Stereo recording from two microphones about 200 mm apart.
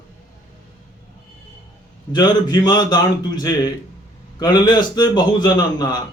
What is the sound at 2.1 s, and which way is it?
A man's voice, 20° left (ahead or behind).